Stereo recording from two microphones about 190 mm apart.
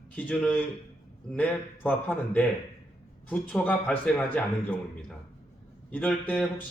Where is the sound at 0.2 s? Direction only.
10° left (ahead or behind).